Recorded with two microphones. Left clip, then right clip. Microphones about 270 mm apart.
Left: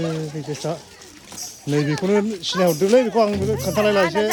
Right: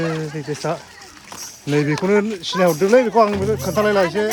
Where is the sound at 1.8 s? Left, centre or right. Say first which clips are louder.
Right 2 dB; centre.